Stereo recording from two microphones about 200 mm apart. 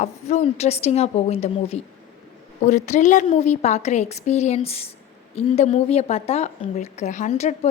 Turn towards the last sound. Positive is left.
turn(degrees=35)  # may be behind; listen again after turning